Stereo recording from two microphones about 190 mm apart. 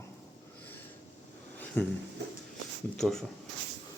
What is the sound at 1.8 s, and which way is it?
Speech, 5° left (ahead or behind).